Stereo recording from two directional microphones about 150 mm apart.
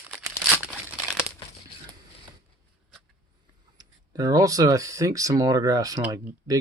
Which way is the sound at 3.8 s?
25° right (ahead or behind).